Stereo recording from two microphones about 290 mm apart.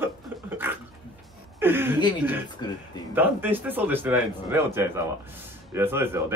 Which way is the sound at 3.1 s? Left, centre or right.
Centre.